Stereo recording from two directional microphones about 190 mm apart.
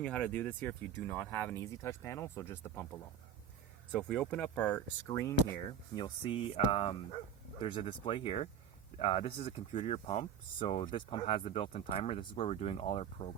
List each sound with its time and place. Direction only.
0.0 s speech: 5° left (ahead or behind)
5.9 s speech: 25° left (ahead or behind)